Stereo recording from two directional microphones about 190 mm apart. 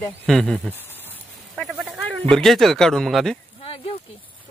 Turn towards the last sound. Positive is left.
turn(degrees=30)  # may be behind; listen again after turning